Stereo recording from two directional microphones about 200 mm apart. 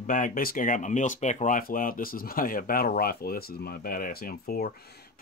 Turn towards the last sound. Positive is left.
turn(degrees=50)  # may be behind; listen again after turning